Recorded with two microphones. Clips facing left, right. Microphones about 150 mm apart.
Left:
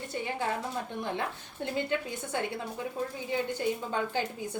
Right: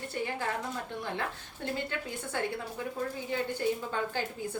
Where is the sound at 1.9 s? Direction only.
15° left (ahead or behind).